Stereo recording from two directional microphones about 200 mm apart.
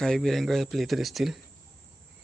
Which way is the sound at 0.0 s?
Centre (ahead or behind).